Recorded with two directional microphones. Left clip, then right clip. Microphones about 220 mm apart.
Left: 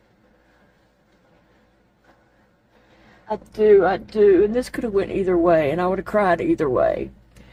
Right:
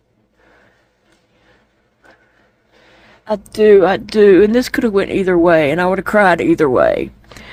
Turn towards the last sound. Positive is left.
turn(degrees=-40)  # may be behind; listen again after turning